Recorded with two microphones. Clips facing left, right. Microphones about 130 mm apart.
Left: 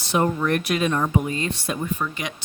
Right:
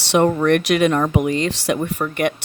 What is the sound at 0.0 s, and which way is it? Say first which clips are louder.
Speech: right 6 dB; 80° right.